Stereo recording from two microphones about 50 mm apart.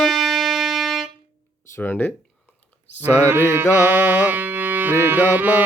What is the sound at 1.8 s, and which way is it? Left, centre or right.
Speech, left.